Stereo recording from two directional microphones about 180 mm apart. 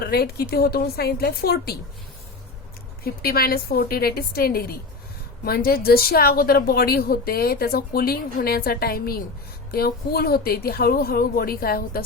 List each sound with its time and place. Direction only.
0.0 s a woman's voice: 60° left (ahead or behind)
3.0 s a woman's voice: 55° left (ahead or behind)